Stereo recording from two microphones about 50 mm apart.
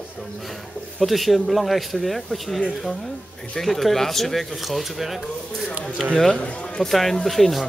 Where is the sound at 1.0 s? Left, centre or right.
Centre.